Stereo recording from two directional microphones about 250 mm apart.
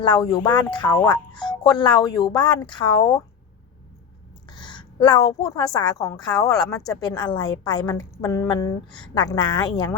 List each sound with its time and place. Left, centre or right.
0.0 s speech: centre
4.4 s speech: centre